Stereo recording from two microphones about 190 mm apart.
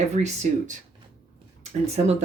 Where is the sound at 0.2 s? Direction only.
35° right (ahead or behind).